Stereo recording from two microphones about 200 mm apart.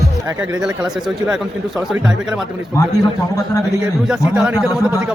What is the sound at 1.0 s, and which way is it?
Speech, centre (ahead or behind).